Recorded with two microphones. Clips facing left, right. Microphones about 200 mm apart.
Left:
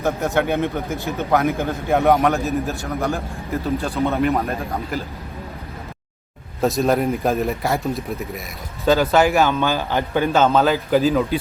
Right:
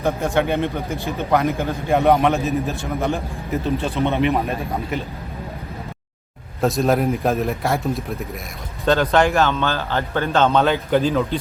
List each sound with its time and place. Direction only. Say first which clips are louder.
0.2 s speech: even; centre (ahead or behind)
6.6 s speech: even; centre (ahead or behind)